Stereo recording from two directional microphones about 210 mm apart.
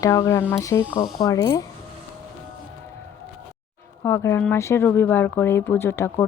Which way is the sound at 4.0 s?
15° left (ahead or behind).